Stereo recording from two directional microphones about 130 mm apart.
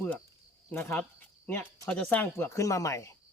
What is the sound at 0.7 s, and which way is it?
Speech, 15° left (ahead or behind).